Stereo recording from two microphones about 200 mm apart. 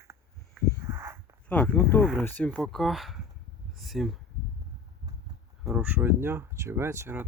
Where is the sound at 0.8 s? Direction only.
15° right (ahead or behind).